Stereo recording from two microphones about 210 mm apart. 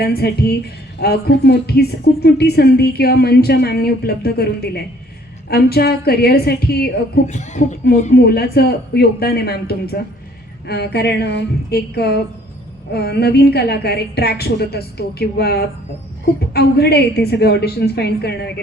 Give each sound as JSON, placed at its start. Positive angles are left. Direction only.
{"t": 0.0, "sound": "a woman's voice", "side_deg": 50}
{"t": 7.3, "sound": "a woman's voice", "side_deg": 35}
{"t": 8.1, "sound": "a woman's voice", "side_deg": 50}